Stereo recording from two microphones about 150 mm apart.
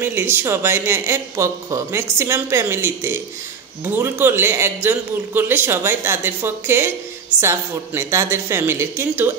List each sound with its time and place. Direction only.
0.0 s speech: 15° right (ahead or behind)